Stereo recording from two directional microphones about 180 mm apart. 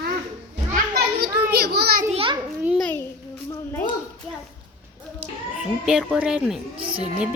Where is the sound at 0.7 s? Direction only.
60° right (ahead or behind).